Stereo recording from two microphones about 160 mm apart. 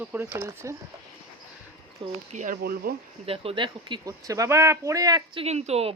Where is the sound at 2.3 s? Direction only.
50° right (ahead or behind).